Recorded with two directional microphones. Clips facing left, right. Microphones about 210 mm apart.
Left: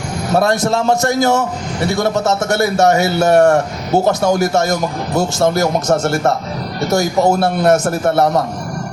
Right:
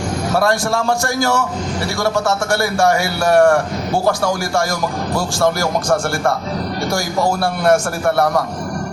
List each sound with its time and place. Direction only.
0.3 s a man's voice: 20° left (ahead or behind)